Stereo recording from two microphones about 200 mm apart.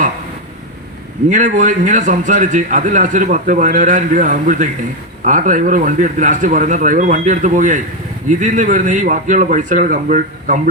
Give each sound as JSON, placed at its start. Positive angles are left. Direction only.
{"t": 1.3, "sound": "a man's voice", "side_deg": -40}